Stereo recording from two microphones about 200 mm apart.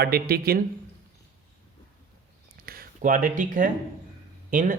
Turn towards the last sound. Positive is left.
turn(degrees=-40)  # may be behind; listen again after turning